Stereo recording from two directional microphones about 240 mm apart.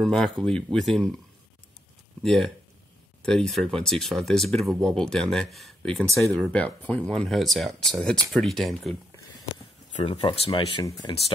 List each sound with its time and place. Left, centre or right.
0.0 s speech: centre
2.2 s speech: centre
9.9 s speech: left